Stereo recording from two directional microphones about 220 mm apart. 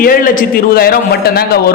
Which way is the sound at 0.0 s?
40° left (ahead or behind).